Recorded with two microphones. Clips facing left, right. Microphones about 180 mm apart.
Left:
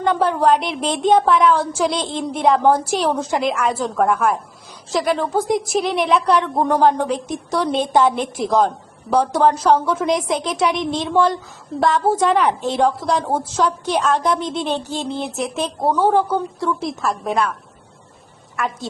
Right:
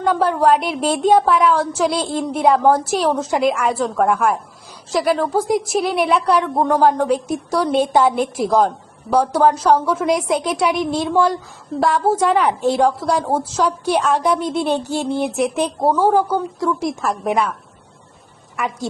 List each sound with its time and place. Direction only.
0.0 s a woman's voice: centre (ahead or behind)
15.8 s a woman's voice: 5° right (ahead or behind)
18.5 s a woman's voice: 15° right (ahead or behind)